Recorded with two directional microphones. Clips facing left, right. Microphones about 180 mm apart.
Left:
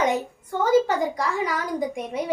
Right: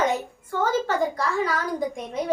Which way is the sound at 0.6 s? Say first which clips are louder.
Left 4 dB; 15° left (ahead or behind).